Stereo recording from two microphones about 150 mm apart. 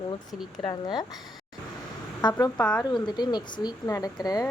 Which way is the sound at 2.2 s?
30° left (ahead or behind).